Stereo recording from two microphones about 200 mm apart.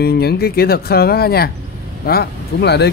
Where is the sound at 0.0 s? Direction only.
55° left (ahead or behind).